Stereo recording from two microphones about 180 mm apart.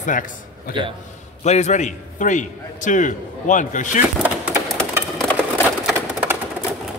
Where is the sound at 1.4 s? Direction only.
40° left (ahead or behind).